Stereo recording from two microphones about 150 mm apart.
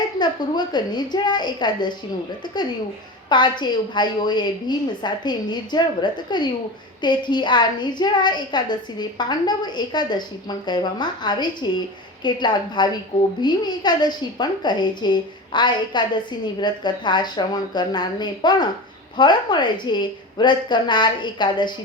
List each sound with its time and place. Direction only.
0.2 s a woman's voice: 30° left (ahead or behind)
3.2 s a woman's voice: 30° left (ahead or behind)